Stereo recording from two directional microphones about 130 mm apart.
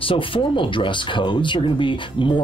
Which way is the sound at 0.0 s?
40° left (ahead or behind).